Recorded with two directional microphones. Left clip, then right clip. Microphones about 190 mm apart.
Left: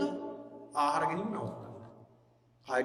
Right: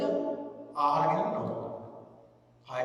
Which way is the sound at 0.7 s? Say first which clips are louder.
Right 3 dB; 45° left (ahead or behind).